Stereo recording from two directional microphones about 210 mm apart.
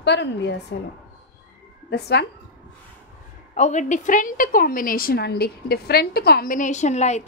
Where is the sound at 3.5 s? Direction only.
35° left (ahead or behind).